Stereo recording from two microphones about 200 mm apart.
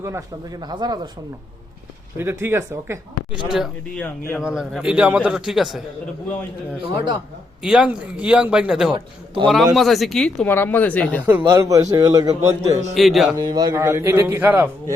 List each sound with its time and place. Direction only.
0.7 s speech: 20° right (ahead or behind)
2.1 s a man's voice: 10° right (ahead or behind)
3.5 s a man's voice: centre (ahead or behind)
4.0 s speech: 10° left (ahead or behind)
4.4 s a man's voice: 5° right (ahead or behind)
6.7 s speech: 25° right (ahead or behind)
7.6 s a man's voice: 5° right (ahead or behind)
11.3 s a man's voice: 10° right (ahead or behind)
12.9 s a man's voice: centre (ahead or behind)
13.3 s a man's voice: 20° right (ahead or behind)